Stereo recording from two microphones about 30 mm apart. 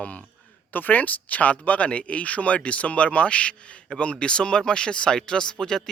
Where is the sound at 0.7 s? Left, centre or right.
Left; by 5.8 s centre.